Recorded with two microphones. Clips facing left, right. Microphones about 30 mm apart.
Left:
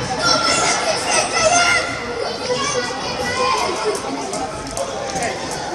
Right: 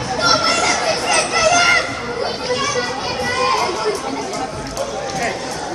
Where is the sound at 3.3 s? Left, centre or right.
Centre.